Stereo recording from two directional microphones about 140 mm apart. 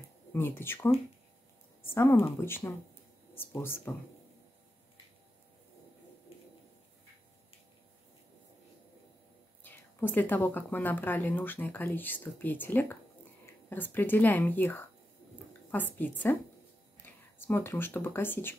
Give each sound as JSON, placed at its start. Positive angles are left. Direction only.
{"t": 0.3, "sound": "speech", "side_deg": 15}
{"t": 9.6, "sound": "speech", "side_deg": 15}